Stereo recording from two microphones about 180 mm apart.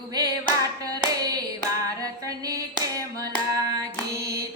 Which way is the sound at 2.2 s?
20° right (ahead or behind).